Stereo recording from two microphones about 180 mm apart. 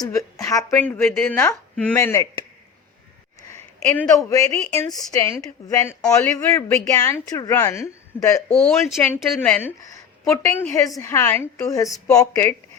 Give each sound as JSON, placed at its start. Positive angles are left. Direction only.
{"t": 0.0, "sound": "a woman's voice", "side_deg": 15}
{"t": 3.5, "sound": "a woman's voice", "side_deg": 15}
{"t": 8.5, "sound": "a woman's voice", "side_deg": 5}